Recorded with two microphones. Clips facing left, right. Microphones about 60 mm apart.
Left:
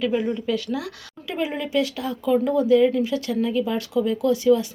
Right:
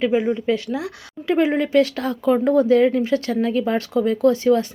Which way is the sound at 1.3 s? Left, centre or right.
Right.